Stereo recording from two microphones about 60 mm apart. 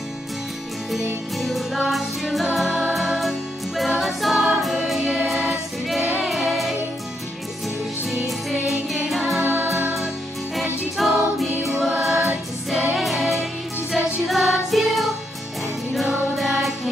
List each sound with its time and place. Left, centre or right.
1.4 s music: centre
8.1 s music: centre
9.4 s music: right
11.0 s music: centre